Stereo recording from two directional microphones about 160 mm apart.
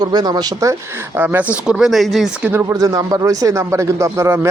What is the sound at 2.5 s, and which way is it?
A man's voice, 15° right (ahead or behind).